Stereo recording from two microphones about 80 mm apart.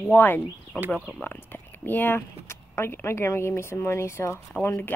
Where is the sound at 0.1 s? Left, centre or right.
Left.